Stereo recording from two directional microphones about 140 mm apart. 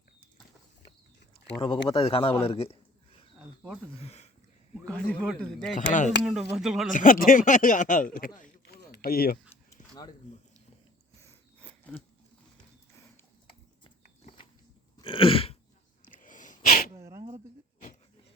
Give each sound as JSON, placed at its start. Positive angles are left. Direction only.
{"t": 1.6, "sound": "speech", "side_deg": 35}
{"t": 3.9, "sound": "speech", "side_deg": 50}
{"t": 4.9, "sound": "speech", "side_deg": 10}
{"t": 5.7, "sound": "speech", "side_deg": 65}
{"t": 6.1, "sound": "speech", "side_deg": -5}
{"t": 6.9, "sound": "speech", "side_deg": 75}
{"t": 8.4, "sound": "a sound", "side_deg": 90}
{"t": 11.2, "sound": "a sound", "side_deg": 15}
{"t": 15.0, "sound": "throat clearing", "side_deg": 40}
{"t": 16.0, "sound": "sneeze", "side_deg": 70}
{"t": 16.9, "sound": "a sound", "side_deg": -20}